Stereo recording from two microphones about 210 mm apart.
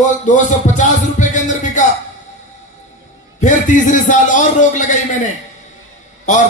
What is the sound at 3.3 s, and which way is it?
A man's voice, 35° left (ahead or behind).